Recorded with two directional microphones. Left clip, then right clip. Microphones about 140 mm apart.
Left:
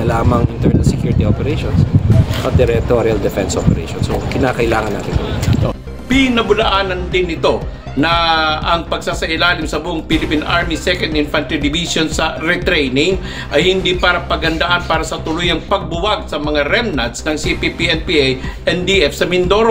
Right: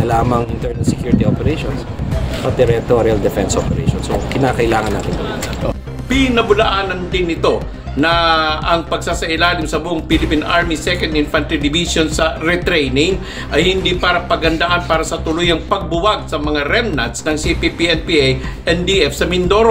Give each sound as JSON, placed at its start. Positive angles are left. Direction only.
{"t": 0.1, "sound": "speech", "side_deg": -10}
{"t": 2.4, "sound": "speech", "side_deg": -5}
{"t": 6.0, "sound": "speech", "side_deg": 20}